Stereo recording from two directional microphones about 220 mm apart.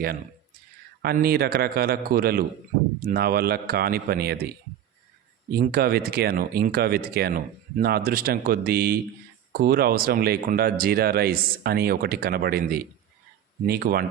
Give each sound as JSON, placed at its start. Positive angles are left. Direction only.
{"t": 1.0, "sound": "speech", "side_deg": -45}
{"t": 5.5, "sound": "speech", "side_deg": -45}